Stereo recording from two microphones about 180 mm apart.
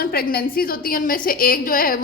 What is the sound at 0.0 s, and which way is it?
A woman's voice, 55° left (ahead or behind).